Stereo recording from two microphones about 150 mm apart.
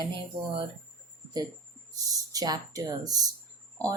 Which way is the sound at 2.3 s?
25° right (ahead or behind).